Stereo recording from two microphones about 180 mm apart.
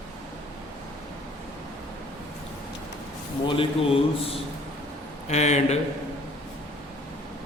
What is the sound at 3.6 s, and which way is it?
Speech, 30° left (ahead or behind).